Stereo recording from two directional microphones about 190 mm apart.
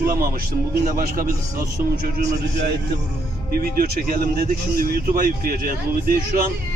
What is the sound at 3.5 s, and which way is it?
Speech, 50° right (ahead or behind).